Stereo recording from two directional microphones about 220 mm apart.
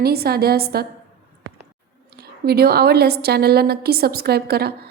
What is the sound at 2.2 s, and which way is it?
A woman's voice, 45° right (ahead or behind).